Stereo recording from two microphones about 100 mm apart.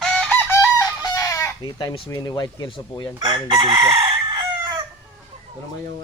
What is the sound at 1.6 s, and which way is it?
Speech, 45° left (ahead or behind).